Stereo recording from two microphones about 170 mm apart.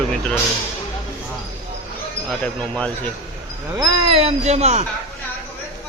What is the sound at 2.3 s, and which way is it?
Speech, 5° left (ahead or behind).